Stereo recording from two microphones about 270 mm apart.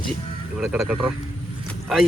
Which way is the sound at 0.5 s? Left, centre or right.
Centre.